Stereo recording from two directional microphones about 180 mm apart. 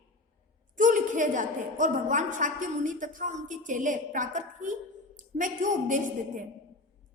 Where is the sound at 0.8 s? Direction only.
45° right (ahead or behind).